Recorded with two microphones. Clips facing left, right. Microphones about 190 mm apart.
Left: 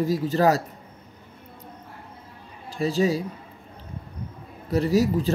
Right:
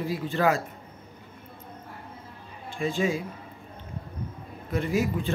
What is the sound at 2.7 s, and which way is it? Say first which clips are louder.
Speech: left 4 dB; 35° left (ahead or behind).